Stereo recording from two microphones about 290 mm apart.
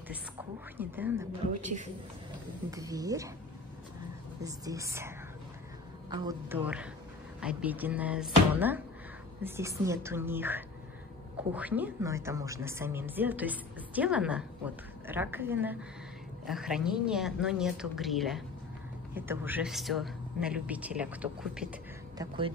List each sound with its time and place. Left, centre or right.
0.7 s a woman's voice: centre
1.6 s a woman's voice: right
2.7 s a woman's voice: centre
4.4 s a woman's voice: centre